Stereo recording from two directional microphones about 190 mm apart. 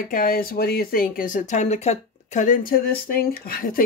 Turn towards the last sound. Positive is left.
turn(degrees=50)  # may be behind; listen again after turning